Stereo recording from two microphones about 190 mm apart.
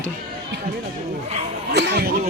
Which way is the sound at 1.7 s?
65° right (ahead or behind).